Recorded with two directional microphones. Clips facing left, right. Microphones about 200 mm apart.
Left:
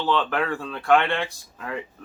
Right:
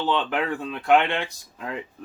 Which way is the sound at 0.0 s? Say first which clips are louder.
Left 1 dB; 20° right (ahead or behind).